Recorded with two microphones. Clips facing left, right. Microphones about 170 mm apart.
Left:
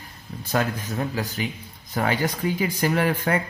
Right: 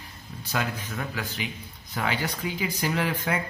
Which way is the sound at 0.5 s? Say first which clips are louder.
Left 5 dB; 35° left (ahead or behind).